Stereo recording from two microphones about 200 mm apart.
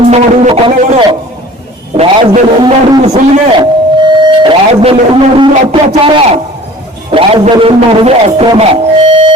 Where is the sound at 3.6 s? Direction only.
20° right (ahead or behind).